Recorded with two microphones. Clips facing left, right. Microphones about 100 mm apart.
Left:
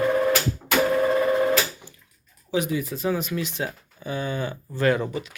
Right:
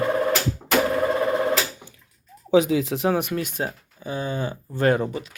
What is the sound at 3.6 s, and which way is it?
Speech, 35° right (ahead or behind).